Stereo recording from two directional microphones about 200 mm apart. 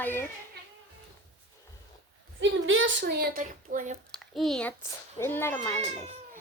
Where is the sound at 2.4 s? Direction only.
75° right (ahead or behind); by 3.9 s 40° right (ahead or behind).